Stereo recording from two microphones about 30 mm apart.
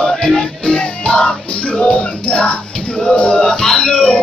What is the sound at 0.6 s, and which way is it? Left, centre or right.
Music, left.